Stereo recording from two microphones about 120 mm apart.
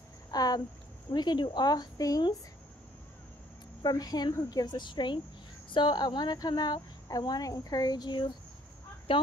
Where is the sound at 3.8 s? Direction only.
35° left (ahead or behind).